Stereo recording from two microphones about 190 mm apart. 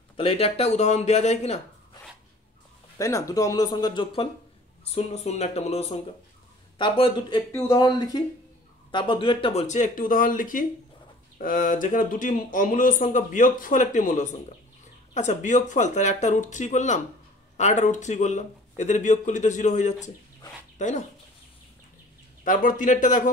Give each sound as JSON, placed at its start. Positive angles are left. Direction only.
{"t": 0.2, "sound": "speech", "side_deg": 30}
{"t": 3.0, "sound": "speech", "side_deg": 15}
{"t": 6.8, "sound": "speech", "side_deg": 25}
{"t": 22.4, "sound": "speech", "side_deg": 45}